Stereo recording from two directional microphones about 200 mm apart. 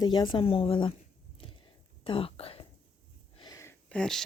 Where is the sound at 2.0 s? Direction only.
25° left (ahead or behind).